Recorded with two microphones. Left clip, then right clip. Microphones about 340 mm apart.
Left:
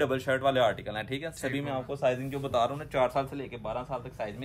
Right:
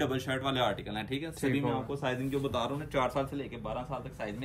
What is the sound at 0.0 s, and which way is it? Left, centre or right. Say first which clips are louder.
A man's voice: left 6 dB; left.